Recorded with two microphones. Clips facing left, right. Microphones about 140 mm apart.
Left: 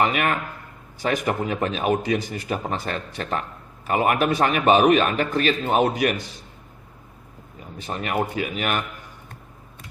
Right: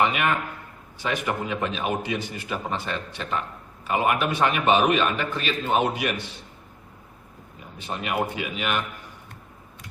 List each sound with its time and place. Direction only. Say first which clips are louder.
0.0 s a man's voice: left 1 dB; 40° left (ahead or behind)
7.8 s a man's voice: left 2 dB; 40° left (ahead or behind)